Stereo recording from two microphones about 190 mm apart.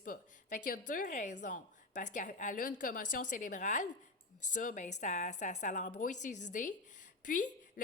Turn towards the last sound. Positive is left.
turn(degrees=45)  # may be behind; listen again after turning